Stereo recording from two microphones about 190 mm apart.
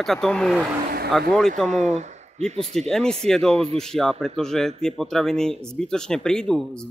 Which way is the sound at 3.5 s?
30° right (ahead or behind).